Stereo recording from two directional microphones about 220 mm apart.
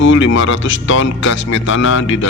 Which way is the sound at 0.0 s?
60° left (ahead or behind).